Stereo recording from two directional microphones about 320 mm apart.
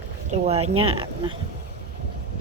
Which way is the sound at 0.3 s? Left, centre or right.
Centre.